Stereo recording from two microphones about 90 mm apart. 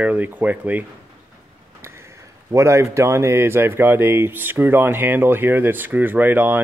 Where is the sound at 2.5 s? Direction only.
30° right (ahead or behind).